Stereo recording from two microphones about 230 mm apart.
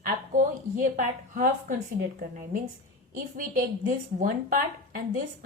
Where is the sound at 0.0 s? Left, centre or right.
Right.